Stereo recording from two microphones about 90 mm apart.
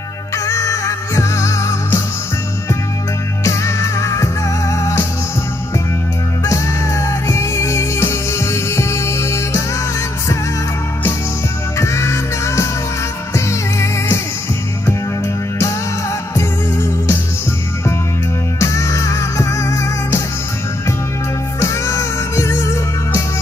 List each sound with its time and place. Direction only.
0.5 s music: 40° left (ahead or behind)
3.4 s music: 30° left (ahead or behind)
6.4 s music: 35° left (ahead or behind)
11.8 s music: 30° left (ahead or behind)
16.3 s music: 30° left (ahead or behind)
18.6 s music: 35° left (ahead or behind)
21.5 s music: 35° left (ahead or behind)